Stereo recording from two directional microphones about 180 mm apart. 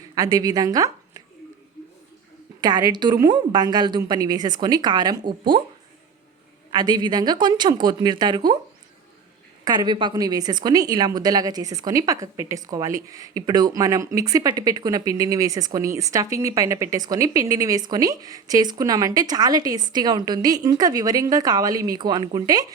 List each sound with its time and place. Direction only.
0.1 s speech: 20° right (ahead or behind)
2.6 s a woman's voice: 20° right (ahead or behind)
6.7 s a woman's voice: 25° right (ahead or behind)
9.6 s a woman's voice: 25° right (ahead or behind)